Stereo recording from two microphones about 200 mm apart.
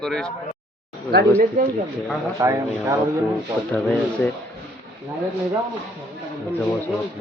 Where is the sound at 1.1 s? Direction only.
55° right (ahead or behind).